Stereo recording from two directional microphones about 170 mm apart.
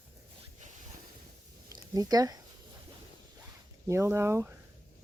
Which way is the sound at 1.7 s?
20° right (ahead or behind).